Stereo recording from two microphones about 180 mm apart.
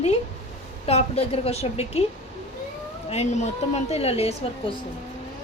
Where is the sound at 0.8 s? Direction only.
35° left (ahead or behind).